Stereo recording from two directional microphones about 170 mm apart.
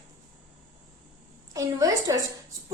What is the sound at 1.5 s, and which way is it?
Speech, 20° right (ahead or behind).